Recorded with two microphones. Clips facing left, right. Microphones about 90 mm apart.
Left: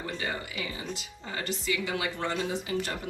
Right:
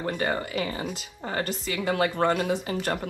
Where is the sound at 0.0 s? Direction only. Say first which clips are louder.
Right 7 dB; 50° right (ahead or behind).